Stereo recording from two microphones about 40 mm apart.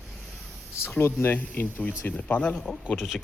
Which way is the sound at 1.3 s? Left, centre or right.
Left.